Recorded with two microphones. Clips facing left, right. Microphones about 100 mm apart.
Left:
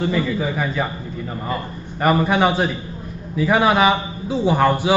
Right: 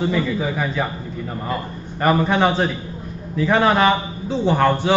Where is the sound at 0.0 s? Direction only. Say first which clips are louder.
Even; centre (ahead or behind).